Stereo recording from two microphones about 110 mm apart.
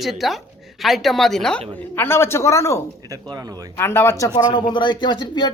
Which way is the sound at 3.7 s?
20° left (ahead or behind).